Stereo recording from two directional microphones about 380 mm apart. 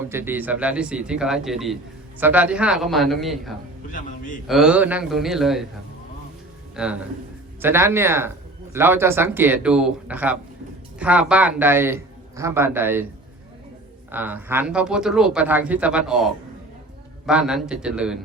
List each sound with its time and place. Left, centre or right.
0.0 s a man's voice: centre
6.8 s a man's voice: centre
14.1 s a man's voice: centre